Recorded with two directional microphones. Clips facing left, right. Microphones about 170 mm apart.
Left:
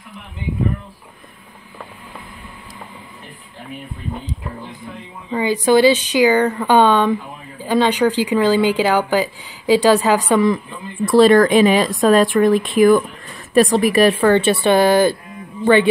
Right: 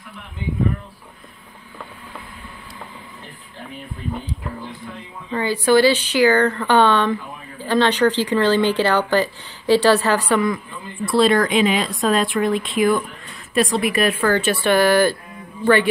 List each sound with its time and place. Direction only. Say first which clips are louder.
5.3 s speech: left 2 dB; 15° left (ahead or behind)
11.1 s speech: left 6 dB; 45° left (ahead or behind); by 15.9 s 20° left (ahead or behind)